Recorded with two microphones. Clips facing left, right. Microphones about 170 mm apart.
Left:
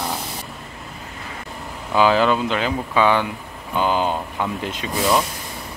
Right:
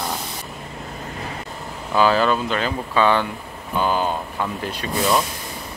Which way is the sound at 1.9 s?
15° left (ahead or behind).